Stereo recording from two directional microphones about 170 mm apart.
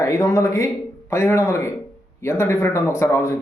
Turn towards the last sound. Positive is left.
turn(degrees=15)  # may be behind; listen again after turning